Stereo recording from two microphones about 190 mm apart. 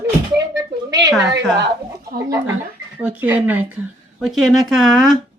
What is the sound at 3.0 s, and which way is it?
Speech, 10° right (ahead or behind).